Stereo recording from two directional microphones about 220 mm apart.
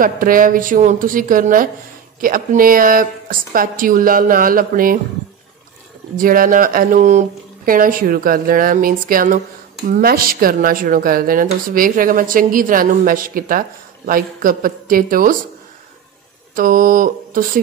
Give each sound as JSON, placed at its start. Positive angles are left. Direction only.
{"t": 0.0, "sound": "speech", "side_deg": -40}
{"t": 6.1, "sound": "speech", "side_deg": -40}
{"t": 16.5, "sound": "speech", "side_deg": -40}